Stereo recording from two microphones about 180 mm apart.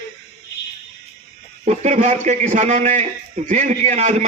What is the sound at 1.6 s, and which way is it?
A man's voice, 40° right (ahead or behind).